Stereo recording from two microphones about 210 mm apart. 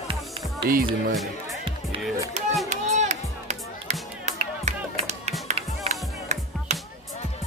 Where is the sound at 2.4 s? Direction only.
30° right (ahead or behind).